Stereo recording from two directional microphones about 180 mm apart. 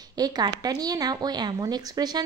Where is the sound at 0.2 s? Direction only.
20° right (ahead or behind).